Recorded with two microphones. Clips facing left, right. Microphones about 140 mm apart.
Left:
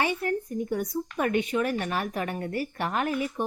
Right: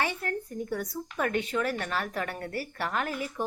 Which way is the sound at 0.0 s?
15° left (ahead or behind).